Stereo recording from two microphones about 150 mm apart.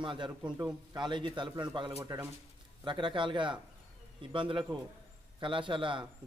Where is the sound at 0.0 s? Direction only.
30° right (ahead or behind).